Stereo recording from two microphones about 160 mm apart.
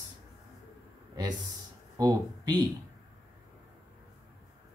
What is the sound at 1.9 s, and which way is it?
Speech, 25° right (ahead or behind).